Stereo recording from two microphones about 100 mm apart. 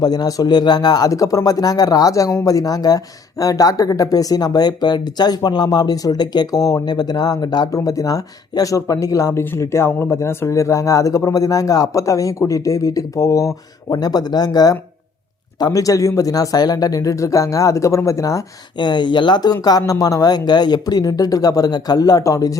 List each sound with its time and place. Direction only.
0.0 s speech: 40° left (ahead or behind)
18.8 s speech: 50° left (ahead or behind)